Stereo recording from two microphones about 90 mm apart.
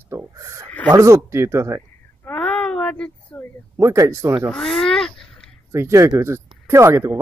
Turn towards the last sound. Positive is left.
turn(degrees=-30)  # may be behind; listen again after turning